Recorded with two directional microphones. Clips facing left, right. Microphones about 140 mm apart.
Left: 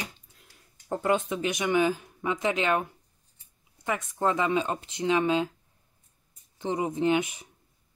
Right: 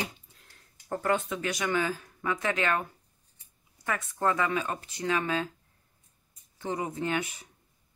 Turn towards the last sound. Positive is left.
turn(degrees=20)  # may be behind; listen again after turning